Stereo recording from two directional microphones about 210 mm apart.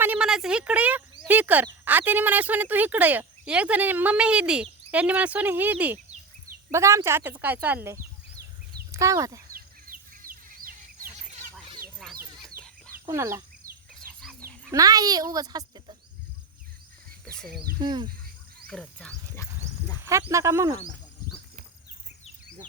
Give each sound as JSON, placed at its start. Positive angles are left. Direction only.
{"t": 0.0, "sound": "a sound", "side_deg": -5}
{"t": 1.6, "sound": "speech", "side_deg": -10}
{"t": 8.9, "sound": "speech", "side_deg": -15}
{"t": 9.5, "sound": "bird", "side_deg": -40}
{"t": 12.0, "sound": "chicken", "side_deg": 0}
{"t": 13.1, "sound": "speech", "side_deg": -15}
{"t": 14.7, "sound": "speech", "side_deg": -15}
{"t": 17.7, "sound": "speech", "side_deg": -20}
{"t": 18.7, "sound": "speech", "side_deg": 5}
{"t": 20.3, "sound": "speech", "side_deg": -15}